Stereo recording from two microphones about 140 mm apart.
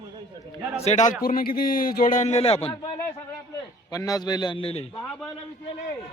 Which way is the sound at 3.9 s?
25° left (ahead or behind).